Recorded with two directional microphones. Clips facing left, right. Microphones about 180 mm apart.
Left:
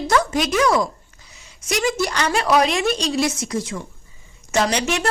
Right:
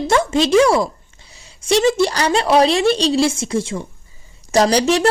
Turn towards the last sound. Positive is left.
turn(degrees=-35)  # may be behind; listen again after turning